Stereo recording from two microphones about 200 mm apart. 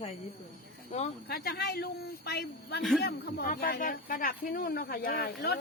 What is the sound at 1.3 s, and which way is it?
Speech, 50° left (ahead or behind).